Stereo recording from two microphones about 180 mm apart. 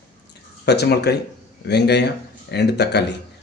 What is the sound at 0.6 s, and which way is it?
Speech, 65° left (ahead or behind).